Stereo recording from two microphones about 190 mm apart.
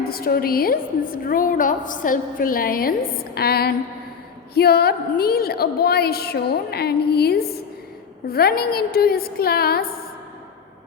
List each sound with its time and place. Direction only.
0.0 s a woman's voice: 50° left (ahead or behind)